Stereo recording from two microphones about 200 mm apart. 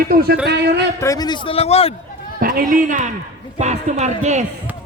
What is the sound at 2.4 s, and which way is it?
A man's voice, 45° right (ahead or behind).